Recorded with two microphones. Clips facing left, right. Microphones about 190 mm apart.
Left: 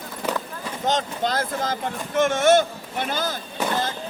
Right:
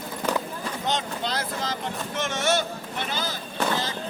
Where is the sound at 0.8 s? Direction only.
45° left (ahead or behind).